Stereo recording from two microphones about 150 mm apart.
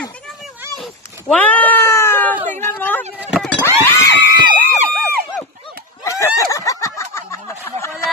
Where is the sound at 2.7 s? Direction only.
15° left (ahead or behind).